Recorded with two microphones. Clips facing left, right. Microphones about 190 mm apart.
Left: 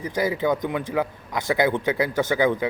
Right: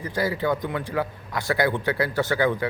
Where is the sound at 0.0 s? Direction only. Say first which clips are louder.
Left 2 dB; 20° left (ahead or behind).